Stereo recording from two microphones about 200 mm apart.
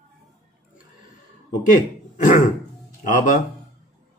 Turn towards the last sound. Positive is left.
turn(degrees=40)  # may be behind; listen again after turning